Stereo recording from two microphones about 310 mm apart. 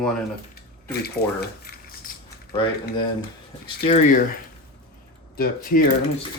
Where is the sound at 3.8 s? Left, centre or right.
Left.